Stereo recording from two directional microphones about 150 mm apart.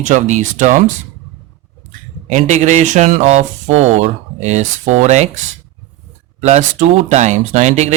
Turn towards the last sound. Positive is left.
turn(degrees=-50)  # may be behind; listen again after turning